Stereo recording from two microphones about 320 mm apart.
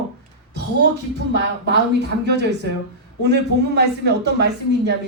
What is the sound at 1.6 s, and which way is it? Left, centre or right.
Speech, right.